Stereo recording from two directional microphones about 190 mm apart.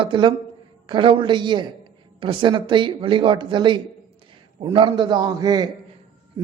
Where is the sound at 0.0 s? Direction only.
25° right (ahead or behind).